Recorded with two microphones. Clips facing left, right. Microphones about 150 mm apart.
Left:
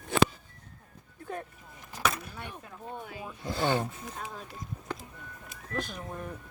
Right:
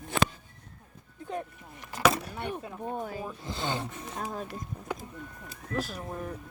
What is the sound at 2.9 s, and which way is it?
Speech, 40° right (ahead or behind).